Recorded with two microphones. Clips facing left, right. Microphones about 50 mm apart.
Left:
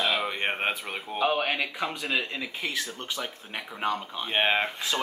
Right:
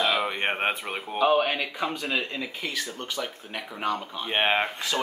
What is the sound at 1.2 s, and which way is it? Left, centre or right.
Speech, centre.